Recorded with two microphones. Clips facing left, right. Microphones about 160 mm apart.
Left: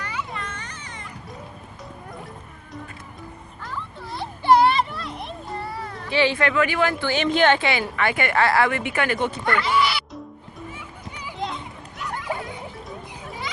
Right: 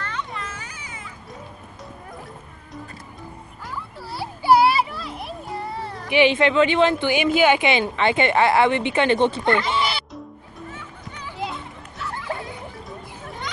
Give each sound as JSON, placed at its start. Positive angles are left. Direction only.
{"t": 0.0, "sound": "children playing", "side_deg": 5}
{"t": 3.6, "sound": "children playing", "side_deg": -5}
{"t": 5.6, "sound": "a sound", "side_deg": -25}
{"t": 6.0, "sound": "a woman's voice", "side_deg": -20}
{"t": 9.7, "sound": "music", "side_deg": -25}
{"t": 11.3, "sound": "children playing", "side_deg": -5}
{"t": 12.3, "sound": "music", "side_deg": 15}